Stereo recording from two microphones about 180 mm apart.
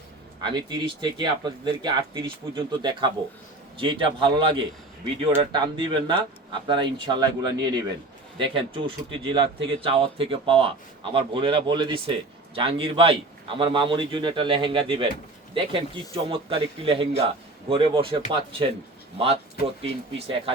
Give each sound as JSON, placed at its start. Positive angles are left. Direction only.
{"t": 0.4, "sound": "speech", "side_deg": -25}
{"t": 19.8, "sound": "speech", "side_deg": -35}